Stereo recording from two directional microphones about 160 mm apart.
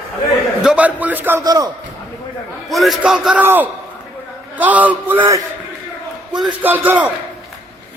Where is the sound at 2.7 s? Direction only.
Centre (ahead or behind).